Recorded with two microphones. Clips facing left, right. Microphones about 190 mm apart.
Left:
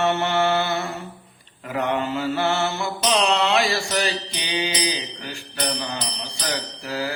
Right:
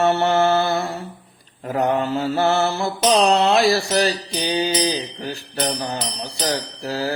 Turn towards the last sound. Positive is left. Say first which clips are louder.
# right 3 dB
turn(degrees=-40)  # may be behind; listen again after turning